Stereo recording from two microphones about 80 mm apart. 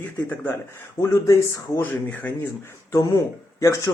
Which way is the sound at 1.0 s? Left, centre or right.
Left.